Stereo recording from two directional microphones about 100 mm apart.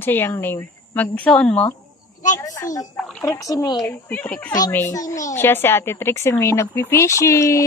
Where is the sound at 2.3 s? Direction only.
35° left (ahead or behind).